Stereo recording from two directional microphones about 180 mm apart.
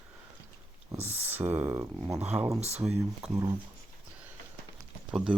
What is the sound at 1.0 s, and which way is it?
Speech, 10° right (ahead or behind).